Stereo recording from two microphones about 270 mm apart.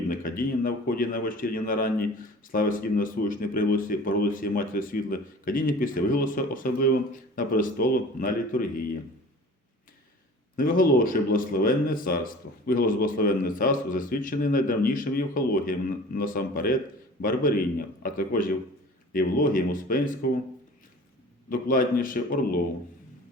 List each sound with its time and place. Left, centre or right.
0.1 s speech: left
10.6 s speech: left
21.5 s speech: left